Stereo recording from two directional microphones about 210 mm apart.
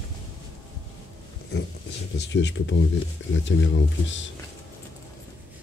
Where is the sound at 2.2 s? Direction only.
55° left (ahead or behind).